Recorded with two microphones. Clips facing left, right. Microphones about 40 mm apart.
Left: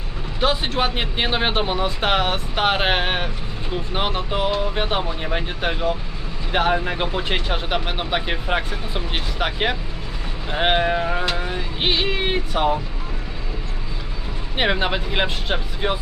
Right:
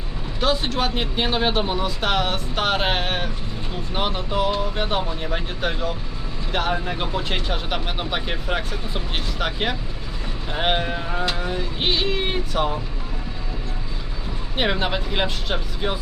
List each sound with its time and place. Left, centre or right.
0.3 s speech: centre
14.5 s speech: centre